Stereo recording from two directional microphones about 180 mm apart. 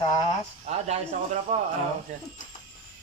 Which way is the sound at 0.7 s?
40° right (ahead or behind).